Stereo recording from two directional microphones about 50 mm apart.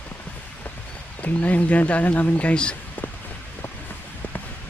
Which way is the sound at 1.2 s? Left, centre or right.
Left.